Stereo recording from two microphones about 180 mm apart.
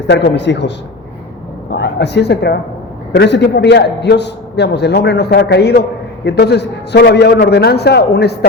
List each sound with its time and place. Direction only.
0.0 s a man's voice: 85° left
1.7 s a man's voice: 70° left (ahead or behind)